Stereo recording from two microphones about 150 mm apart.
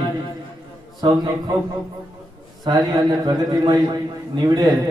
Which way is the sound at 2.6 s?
25° right (ahead or behind).